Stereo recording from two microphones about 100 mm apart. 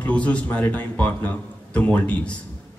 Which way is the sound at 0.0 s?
15° left (ahead or behind).